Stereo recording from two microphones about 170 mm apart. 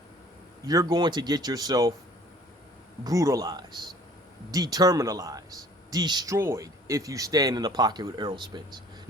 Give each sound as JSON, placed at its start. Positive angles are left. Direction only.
{"t": 0.6, "sound": "speech", "side_deg": -20}
{"t": 3.0, "sound": "speech", "side_deg": -20}